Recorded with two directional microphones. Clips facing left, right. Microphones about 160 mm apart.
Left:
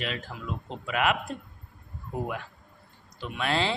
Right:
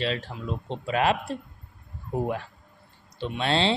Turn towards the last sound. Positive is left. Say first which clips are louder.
# right 3 dB
turn(degrees=-30)  # may be behind; listen again after turning